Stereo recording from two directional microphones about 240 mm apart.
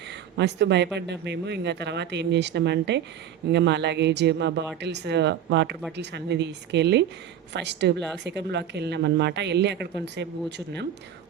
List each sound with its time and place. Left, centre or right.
0.3 s a woman's voice: right